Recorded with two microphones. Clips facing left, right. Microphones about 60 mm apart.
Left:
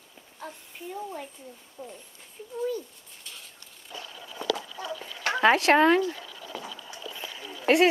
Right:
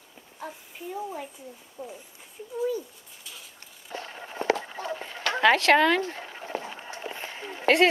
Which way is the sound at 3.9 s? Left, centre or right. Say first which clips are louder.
Right 5 dB; right.